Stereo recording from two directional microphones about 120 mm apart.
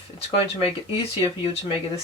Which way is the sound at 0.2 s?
55° left (ahead or behind).